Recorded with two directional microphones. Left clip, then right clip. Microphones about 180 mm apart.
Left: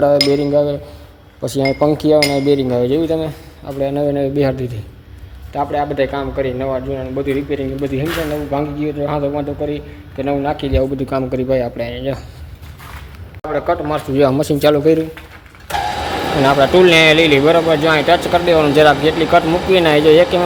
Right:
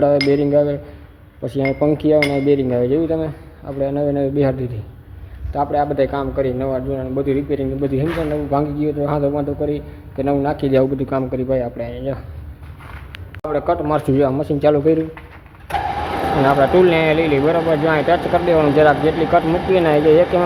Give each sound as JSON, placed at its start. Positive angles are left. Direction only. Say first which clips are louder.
{"t": 0.0, "sound": "cutlery", "louder": "left 2 dB", "side_deg": 0}
{"t": 1.4, "sound": "speech", "louder": "left 3 dB", "side_deg": 15}
{"t": 5.5, "sound": "a man's voice", "louder": "even", "side_deg": -10}
{"t": 10.9, "sound": "speech", "louder": "left 2 dB", "side_deg": 10}
{"t": 13.4, "sound": "cutlery", "louder": "left 1 dB", "side_deg": -5}
{"t": 14.2, "sound": "speech", "louder": "left 4 dB", "side_deg": 25}
{"t": 16.5, "sound": "speech", "louder": "left 4 dB", "side_deg": 15}